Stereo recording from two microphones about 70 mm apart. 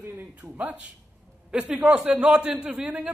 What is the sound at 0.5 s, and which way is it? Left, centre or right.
Speech, right.